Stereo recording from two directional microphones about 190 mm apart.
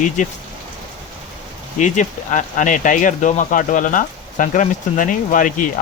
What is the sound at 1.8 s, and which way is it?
Speech, 40° left (ahead or behind).